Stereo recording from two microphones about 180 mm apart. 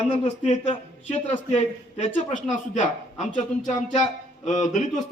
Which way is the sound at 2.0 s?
40° left (ahead or behind).